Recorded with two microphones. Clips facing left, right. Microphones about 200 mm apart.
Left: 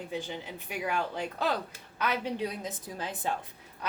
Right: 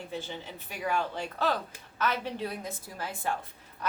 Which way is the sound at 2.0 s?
15° left (ahead or behind).